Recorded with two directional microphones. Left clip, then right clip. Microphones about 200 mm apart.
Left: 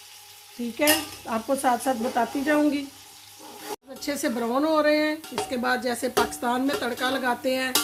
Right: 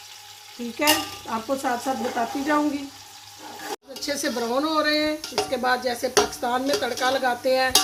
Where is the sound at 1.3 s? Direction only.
50° left (ahead or behind).